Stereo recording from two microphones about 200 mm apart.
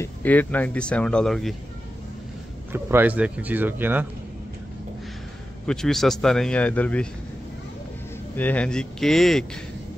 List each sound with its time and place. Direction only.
0.0 s speech: 10° left (ahead or behind)
2.7 s speech: 10° right (ahead or behind)
5.7 s speech: centre (ahead or behind)
8.4 s speech: 5° left (ahead or behind)